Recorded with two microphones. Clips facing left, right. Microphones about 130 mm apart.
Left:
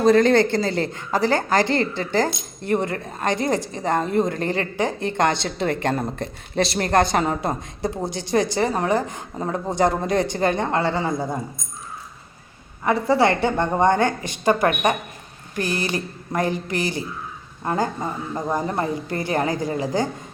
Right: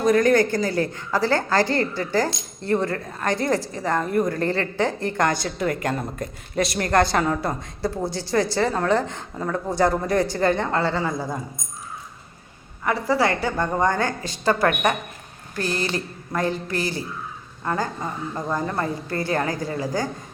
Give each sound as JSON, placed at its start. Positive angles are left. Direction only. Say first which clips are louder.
{"t": 0.0, "sound": "speech", "louder": "left 2 dB", "side_deg": 30}
{"t": 12.8, "sound": "speech", "louder": "left 3 dB", "side_deg": 25}